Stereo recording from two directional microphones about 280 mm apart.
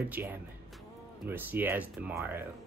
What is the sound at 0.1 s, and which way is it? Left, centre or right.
Speech, centre.